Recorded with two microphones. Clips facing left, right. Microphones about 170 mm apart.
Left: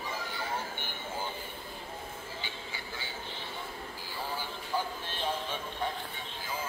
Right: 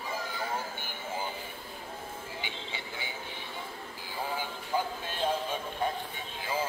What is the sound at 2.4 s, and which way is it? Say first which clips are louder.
Music: right 2 dB; 20° right (ahead or behind).